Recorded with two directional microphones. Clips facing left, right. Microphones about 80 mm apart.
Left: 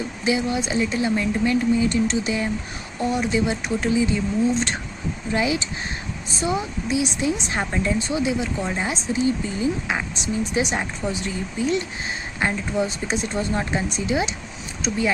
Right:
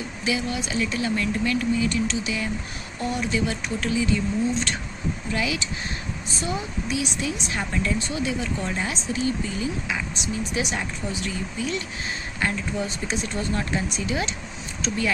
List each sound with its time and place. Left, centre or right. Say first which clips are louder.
0.3 s speech: left 4 dB; left
5.3 s speech: left 6 dB; left